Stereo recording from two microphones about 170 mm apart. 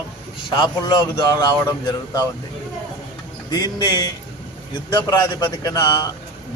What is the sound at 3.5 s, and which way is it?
A man's voice, 25° left (ahead or behind).